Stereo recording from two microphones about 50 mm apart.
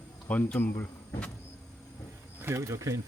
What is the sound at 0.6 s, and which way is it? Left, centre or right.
Speech, left.